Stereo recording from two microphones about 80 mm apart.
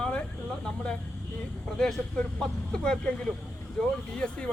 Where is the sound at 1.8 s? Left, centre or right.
Centre.